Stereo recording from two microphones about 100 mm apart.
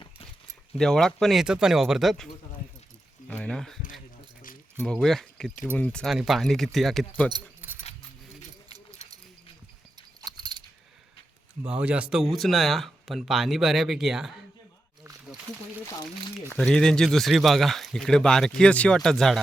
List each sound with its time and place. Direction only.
0.8 s speech: 5° left (ahead or behind)
6.1 s speech: 5° right (ahead or behind)
7.6 s a sound: 20° right (ahead or behind)
10.2 s keys jangling: 45° right (ahead or behind)
11.6 s speech: 15° right (ahead or behind)
16.5 s speech: 5° left (ahead or behind)